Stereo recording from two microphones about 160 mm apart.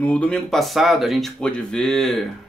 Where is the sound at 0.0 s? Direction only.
5° left (ahead or behind).